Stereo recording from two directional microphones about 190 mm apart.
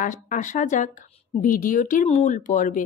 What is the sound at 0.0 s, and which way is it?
Speech, 40° left (ahead or behind).